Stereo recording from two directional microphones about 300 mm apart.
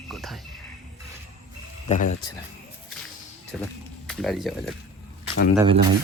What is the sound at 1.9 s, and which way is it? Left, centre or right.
Speech, left.